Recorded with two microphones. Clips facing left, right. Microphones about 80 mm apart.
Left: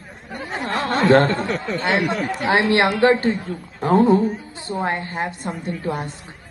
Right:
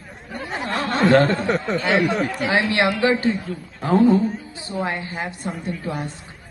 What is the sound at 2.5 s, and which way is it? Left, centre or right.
Speech, left.